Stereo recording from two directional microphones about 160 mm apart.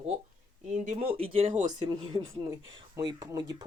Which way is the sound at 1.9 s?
25° right (ahead or behind).